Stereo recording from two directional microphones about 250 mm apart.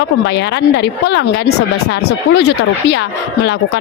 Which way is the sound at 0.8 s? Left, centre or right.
Left.